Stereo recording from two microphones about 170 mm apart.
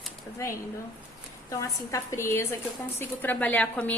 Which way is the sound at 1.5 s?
20° left (ahead or behind).